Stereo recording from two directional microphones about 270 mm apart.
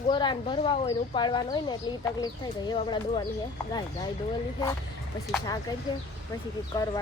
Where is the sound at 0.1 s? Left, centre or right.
Centre.